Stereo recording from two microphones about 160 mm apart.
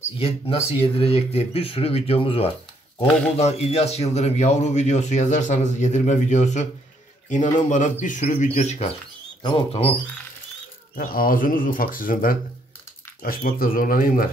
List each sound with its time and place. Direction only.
0.2 s a man's voice: 40° left (ahead or behind)
9.4 s speech: 30° left (ahead or behind)
11.0 s speech: 65° left (ahead or behind)